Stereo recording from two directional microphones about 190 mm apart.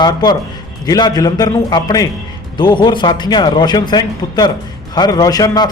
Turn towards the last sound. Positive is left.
turn(degrees=20)  # may be behind; listen again after turning